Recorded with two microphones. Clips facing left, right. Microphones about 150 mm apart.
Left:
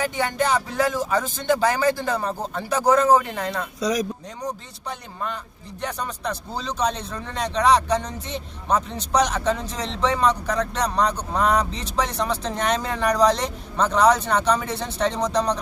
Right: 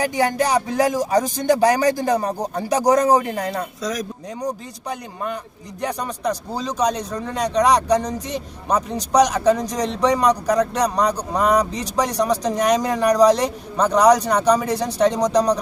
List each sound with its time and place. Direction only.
0.5 s speech: 15° right (ahead or behind)
1.3 s speech: 40° right (ahead or behind)
1.6 s speech: 15° right (ahead or behind)
3.8 s speech: centre (ahead or behind)
4.4 s speech: 10° right (ahead or behind)
9.1 s speech: 10° right (ahead or behind)